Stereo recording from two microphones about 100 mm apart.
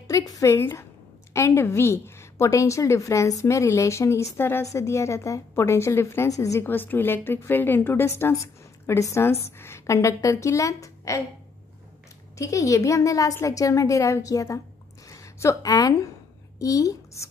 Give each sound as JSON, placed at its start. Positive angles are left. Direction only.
{"t": 0.1, "sound": "a woman's voice", "side_deg": 35}
{"t": 6.6, "sound": "a woman's voice", "side_deg": 20}
{"t": 12.4, "sound": "a woman's voice", "side_deg": 30}